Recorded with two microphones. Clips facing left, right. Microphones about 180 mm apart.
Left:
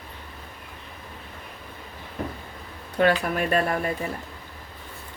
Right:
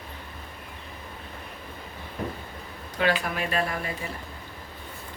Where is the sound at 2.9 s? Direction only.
50° left (ahead or behind).